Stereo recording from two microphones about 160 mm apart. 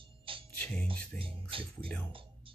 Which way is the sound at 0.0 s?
35° right (ahead or behind).